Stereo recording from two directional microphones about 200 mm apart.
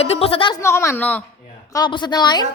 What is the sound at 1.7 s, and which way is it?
Speech, 20° left (ahead or behind).